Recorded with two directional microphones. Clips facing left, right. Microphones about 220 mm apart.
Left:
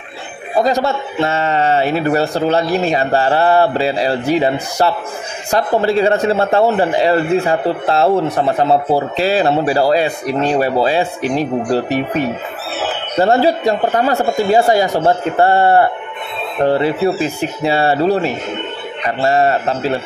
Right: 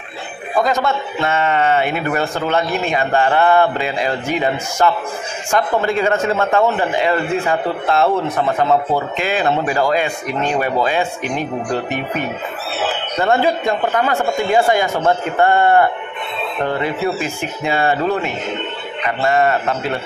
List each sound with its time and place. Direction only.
0.6 s a man's voice: 35° left (ahead or behind)